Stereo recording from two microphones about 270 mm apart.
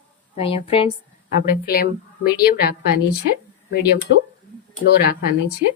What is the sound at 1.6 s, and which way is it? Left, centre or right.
A woman's voice, left.